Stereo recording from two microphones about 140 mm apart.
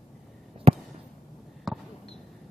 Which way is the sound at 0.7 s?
45° right (ahead or behind).